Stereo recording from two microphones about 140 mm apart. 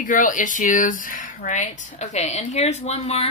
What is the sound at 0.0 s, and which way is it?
A woman's voice, 70° left (ahead or behind).